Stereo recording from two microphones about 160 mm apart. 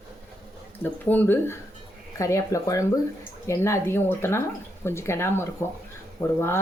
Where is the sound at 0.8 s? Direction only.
10° left (ahead or behind).